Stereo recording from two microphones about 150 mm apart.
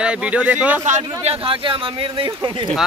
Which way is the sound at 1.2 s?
40° right (ahead or behind).